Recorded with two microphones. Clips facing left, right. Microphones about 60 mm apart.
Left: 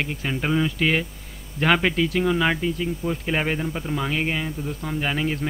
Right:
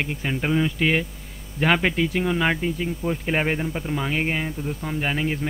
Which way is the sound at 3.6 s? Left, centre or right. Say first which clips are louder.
Even; centre.